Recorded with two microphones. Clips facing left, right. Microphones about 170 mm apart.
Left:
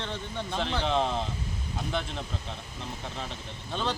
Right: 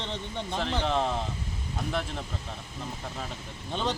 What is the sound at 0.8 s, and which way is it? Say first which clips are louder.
Speech: left 1 dB; centre (ahead or behind).